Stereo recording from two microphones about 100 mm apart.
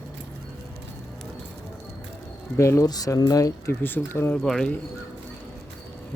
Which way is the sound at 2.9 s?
40° left (ahead or behind).